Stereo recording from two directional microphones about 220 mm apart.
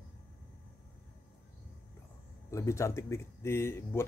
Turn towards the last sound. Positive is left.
turn(degrees=10)  # may be behind; listen again after turning